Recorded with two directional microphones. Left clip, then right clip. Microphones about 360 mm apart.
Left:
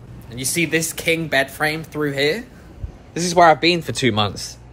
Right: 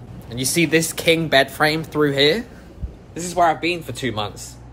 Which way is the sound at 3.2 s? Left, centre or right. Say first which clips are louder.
Left 5 dB; centre.